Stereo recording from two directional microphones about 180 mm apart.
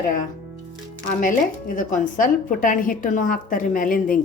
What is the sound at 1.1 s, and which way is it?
Speech, 45° left (ahead or behind).